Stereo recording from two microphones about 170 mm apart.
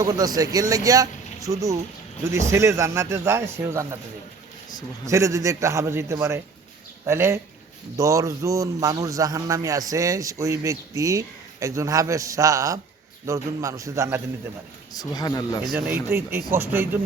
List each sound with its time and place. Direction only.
0.0 s a man's voice: 20° right (ahead or behind)
5.0 s a man's voice: 20° right (ahead or behind)
14.9 s speech: 20° left (ahead or behind)
15.6 s speech: 5° right (ahead or behind)